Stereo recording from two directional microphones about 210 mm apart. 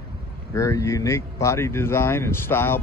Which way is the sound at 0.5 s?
15° left (ahead or behind).